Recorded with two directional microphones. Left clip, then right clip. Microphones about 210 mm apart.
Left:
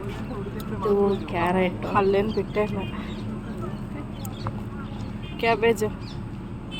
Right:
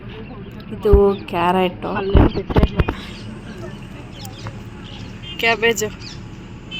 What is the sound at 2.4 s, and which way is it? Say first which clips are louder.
Speech: right 5 dB; 10° left (ahead or behind).